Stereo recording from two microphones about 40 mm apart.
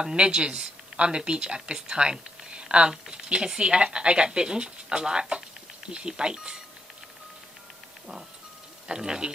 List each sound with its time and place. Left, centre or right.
0.0 s speech: right
8.8 s speech: centre